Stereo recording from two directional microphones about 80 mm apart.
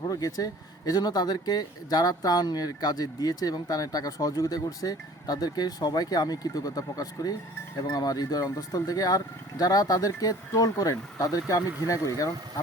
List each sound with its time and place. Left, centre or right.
0.0 s speech: left